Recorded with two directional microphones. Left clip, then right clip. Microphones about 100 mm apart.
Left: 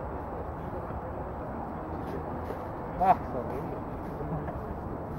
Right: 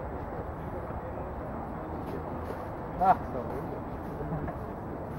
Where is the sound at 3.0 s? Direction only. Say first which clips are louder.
Even; 20° left (ahead or behind).